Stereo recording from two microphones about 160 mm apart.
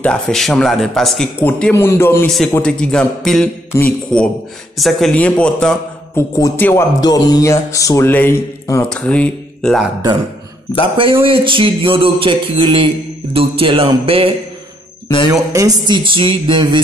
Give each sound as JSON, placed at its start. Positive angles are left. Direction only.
{"t": 0.0, "sound": "speech", "side_deg": 5}
{"t": 2.2, "sound": "speech", "side_deg": 5}
{"t": 6.1, "sound": "speech", "side_deg": 20}
{"t": 8.8, "sound": "speech", "side_deg": 5}
{"t": 11.2, "sound": "a sound", "side_deg": -30}
{"t": 15.5, "sound": "speech", "side_deg": -20}